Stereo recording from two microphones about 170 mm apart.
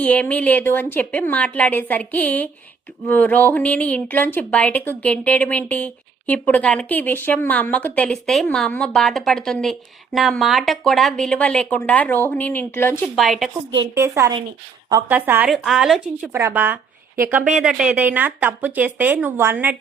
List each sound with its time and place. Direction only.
0.0 s a woman's voice: 10° left (ahead or behind)
13.1 s a woman's voice: centre (ahead or behind)
13.9 s a woman's voice: 15° right (ahead or behind)
15.1 s a woman's voice: 10° right (ahead or behind)